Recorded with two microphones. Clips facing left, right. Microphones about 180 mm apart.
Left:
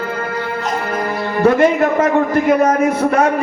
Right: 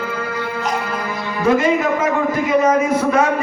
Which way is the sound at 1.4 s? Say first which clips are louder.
Left 3 dB; 60° left (ahead or behind).